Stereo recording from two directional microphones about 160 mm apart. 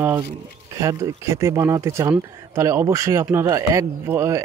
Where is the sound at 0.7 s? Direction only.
20° right (ahead or behind).